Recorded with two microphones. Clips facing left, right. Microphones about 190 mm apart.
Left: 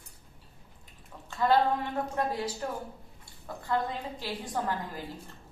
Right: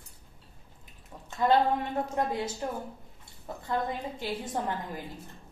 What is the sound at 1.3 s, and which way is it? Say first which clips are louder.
A woman's voice: right 1 dB; 20° right (ahead or behind).